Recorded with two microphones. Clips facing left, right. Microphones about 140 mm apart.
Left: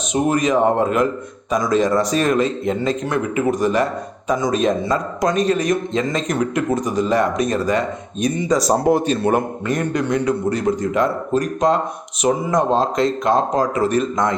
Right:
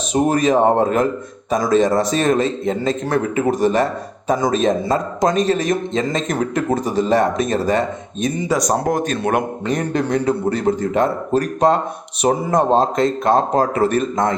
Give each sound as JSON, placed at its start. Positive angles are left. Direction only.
{"t": 0.1, "sound": "a man's voice", "side_deg": -35}
{"t": 6.2, "sound": "speech", "side_deg": -50}
{"t": 6.5, "sound": "a man's voice", "side_deg": -30}
{"t": 8.4, "sound": "speech", "side_deg": 0}
{"t": 9.6, "sound": "a man's voice", "side_deg": -25}
{"t": 12.7, "sound": "speech", "side_deg": -50}